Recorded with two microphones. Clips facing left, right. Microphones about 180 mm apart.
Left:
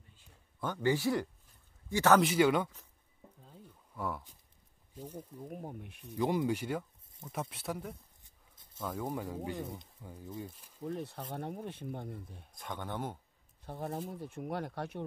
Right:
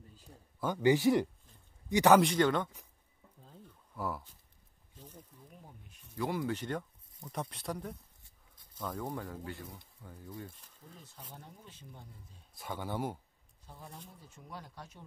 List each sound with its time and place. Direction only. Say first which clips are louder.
0.1 s a sound: right 9 dB; 40° right (ahead or behind)
0.6 s speech: right 3 dB; 5° right (ahead or behind)
0.8 s speech: right 4 dB; 20° right (ahead or behind)
2.2 s speech: left 2 dB; 10° left (ahead or behind)
3.4 s a sound: right 2 dB; centre (ahead or behind)
4.9 s speech: left 9 dB; 10° left (ahead or behind)
5.4 s speech: left 12 dB; 55° left (ahead or behind)
6.0 s speech: left 4 dB; 20° left (ahead or behind); by 8.0 s 5° left (ahead or behind)
8.2 s a sound: even; 25° left (ahead or behind)
8.8 s speech: left 2 dB; 10° left (ahead or behind)
10.8 s speech: left 16 dB; 70° left (ahead or behind)
12.5 s speech: right 2 dB; 5° right (ahead or behind)
13.7 s speech: left 12 dB; 65° left (ahead or behind)